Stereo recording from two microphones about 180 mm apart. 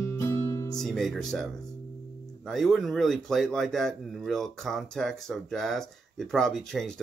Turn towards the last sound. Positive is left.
turn(degrees=5)  # may be behind; listen again after turning